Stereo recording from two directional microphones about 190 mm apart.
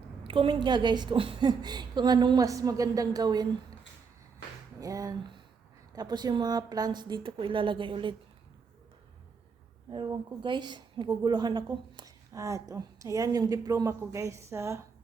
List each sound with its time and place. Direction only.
0.3 s a woman's voice: 30° right (ahead or behind)
4.8 s a sound: 20° right (ahead or behind)
5.9 s a woman's voice: 20° right (ahead or behind)
9.9 s a woman's voice: 25° right (ahead or behind)